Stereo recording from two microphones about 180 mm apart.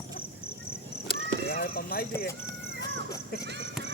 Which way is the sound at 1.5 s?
55° left (ahead or behind).